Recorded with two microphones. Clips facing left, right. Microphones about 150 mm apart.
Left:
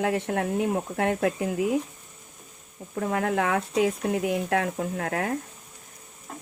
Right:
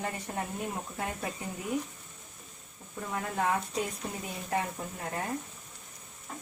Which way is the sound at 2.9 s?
75° left (ahead or behind).